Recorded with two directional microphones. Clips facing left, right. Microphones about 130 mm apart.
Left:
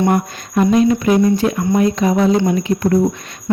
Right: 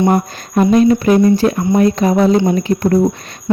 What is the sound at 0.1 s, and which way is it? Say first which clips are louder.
Speech: right 2 dB; 40° right (ahead or behind).